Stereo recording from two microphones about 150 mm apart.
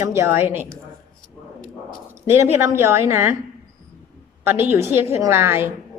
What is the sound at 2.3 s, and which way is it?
Speech, 15° right (ahead or behind).